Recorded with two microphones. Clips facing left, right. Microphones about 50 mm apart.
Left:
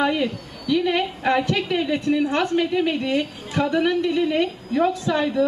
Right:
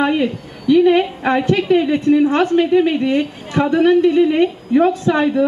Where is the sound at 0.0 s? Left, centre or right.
Right.